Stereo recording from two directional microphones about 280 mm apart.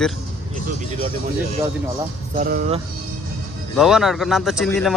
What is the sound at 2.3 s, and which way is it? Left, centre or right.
Speech, right.